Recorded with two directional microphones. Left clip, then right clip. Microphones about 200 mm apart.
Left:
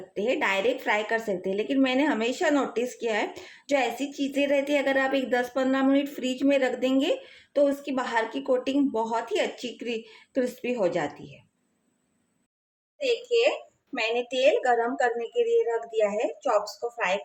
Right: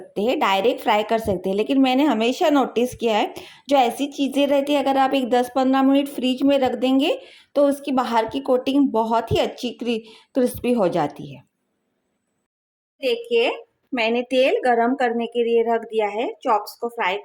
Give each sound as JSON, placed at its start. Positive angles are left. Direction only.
{"t": 0.1, "sound": "a woman's voice", "side_deg": -30}
{"t": 13.0, "sound": "a woman's voice", "side_deg": -45}